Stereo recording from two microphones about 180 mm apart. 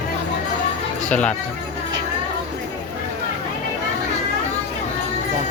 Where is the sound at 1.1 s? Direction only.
5° left (ahead or behind).